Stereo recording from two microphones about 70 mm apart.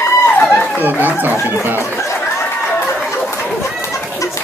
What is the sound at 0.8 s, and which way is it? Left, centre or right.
Speech, right.